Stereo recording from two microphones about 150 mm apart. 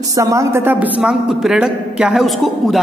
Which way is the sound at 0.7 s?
5° right (ahead or behind).